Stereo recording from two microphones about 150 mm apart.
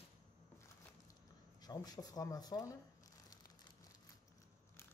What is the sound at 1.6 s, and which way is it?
Speech, 25° left (ahead or behind).